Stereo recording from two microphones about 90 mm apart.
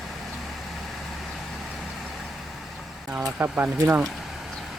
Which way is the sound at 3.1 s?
20° right (ahead or behind).